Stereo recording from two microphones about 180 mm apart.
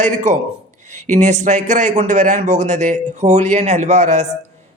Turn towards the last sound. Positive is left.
turn(degrees=-40)  # may be behind; listen again after turning